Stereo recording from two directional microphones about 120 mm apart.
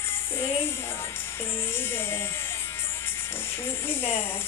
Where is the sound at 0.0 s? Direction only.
20° left (ahead or behind).